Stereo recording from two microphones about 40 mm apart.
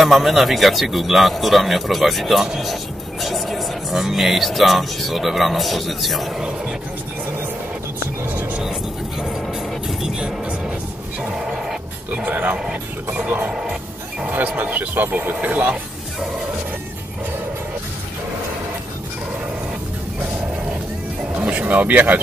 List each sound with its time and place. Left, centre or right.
0.0 s speech: centre
6.3 s speech: centre
10.0 s speech: centre
11.3 s music: centre
12.3 s speech: right
13.5 s music: centre
14.3 s speech: right
21.4 s speech: right